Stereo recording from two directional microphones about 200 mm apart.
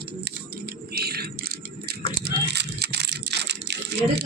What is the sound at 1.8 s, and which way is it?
Computer keyboard, 55° right (ahead or behind).